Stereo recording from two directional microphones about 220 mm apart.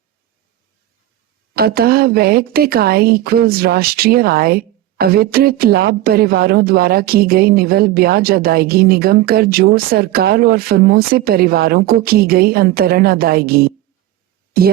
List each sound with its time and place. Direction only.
1.5 s speech: 45° right (ahead or behind)